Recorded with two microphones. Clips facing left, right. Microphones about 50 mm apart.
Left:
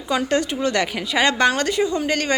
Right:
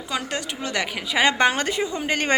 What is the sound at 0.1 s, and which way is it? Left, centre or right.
A woman's voice, centre.